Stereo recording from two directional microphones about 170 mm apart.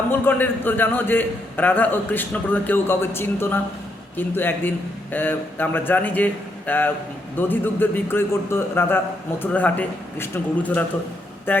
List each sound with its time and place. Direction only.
0.1 s a man's voice: 10° left (ahead or behind)